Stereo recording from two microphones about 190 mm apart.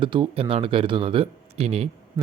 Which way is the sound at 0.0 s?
25° right (ahead or behind).